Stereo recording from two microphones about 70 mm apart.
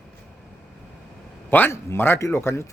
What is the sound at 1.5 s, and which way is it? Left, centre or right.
Speech, left.